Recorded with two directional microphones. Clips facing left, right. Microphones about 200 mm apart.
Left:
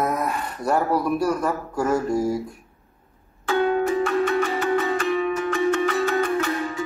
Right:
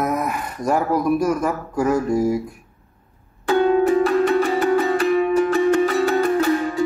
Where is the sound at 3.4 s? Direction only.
35° right (ahead or behind).